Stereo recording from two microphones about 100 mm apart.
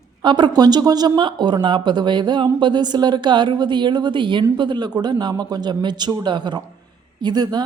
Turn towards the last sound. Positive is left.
turn(degrees=-45)  # may be behind; listen again after turning